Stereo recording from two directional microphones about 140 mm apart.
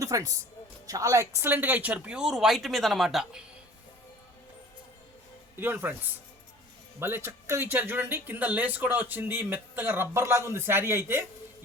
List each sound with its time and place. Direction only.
0.0 s speech: 25° right (ahead or behind); by 3.4 s centre (ahead or behind)
5.5 s speech: 15° right (ahead or behind)
7.0 s speech: 15° right (ahead or behind)